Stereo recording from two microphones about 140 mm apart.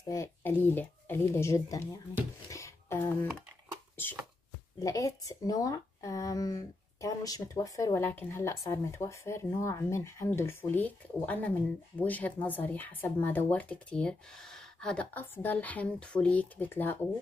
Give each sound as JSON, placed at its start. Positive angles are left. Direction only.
{"t": 0.0, "sound": "speech", "side_deg": 25}
{"t": 2.5, "sound": "a sound", "side_deg": 20}
{"t": 4.7, "sound": "speech", "side_deg": 25}